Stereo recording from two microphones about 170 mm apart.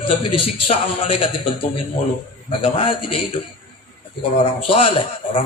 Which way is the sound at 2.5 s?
30° left (ahead or behind).